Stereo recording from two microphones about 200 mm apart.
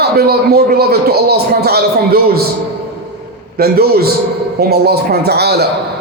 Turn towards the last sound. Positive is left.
turn(degrees=-55)  # may be behind; listen again after turning